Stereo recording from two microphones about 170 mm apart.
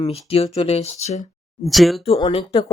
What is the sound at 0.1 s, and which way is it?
Speech, 35° left (ahead or behind).